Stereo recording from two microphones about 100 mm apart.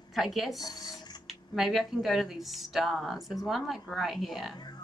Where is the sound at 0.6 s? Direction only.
40° left (ahead or behind).